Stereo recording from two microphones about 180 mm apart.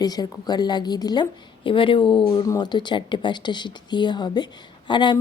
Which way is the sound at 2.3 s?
20° left (ahead or behind).